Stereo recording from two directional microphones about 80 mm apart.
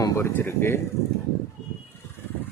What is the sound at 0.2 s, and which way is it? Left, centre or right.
Speech, left.